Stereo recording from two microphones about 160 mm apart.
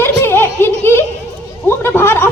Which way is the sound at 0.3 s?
15° left (ahead or behind).